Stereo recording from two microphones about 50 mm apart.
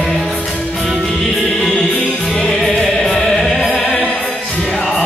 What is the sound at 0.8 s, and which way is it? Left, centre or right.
Music, centre.